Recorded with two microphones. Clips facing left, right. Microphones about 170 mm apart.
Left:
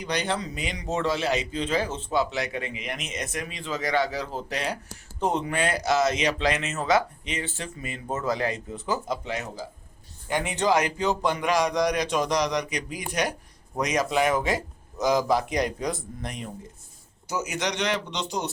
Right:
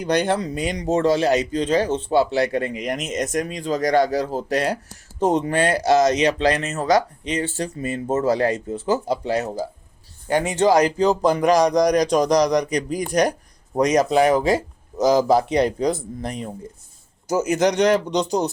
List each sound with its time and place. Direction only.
0.0 s speech: 50° right (ahead or behind)
8.0 s speech: 30° right (ahead or behind)
17.2 s a man's voice: 45° right (ahead or behind)